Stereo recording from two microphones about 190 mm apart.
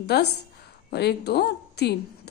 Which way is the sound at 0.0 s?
60° left (ahead or behind).